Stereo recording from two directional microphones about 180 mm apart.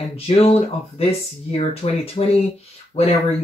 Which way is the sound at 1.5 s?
35° left (ahead or behind).